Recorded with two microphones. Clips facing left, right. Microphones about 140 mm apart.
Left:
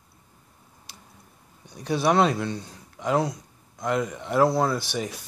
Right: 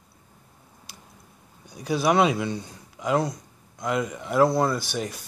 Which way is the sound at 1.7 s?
5° right (ahead or behind).